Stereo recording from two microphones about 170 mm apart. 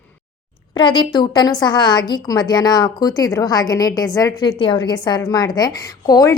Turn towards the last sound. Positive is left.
turn(degrees=20)  # may be behind; listen again after turning